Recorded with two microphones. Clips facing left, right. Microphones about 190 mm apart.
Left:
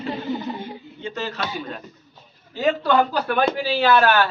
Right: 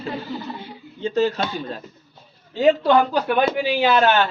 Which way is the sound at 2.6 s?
20° right (ahead or behind).